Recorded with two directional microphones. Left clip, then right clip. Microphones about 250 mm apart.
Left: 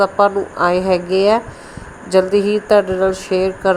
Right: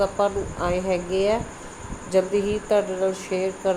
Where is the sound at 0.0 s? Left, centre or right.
Left.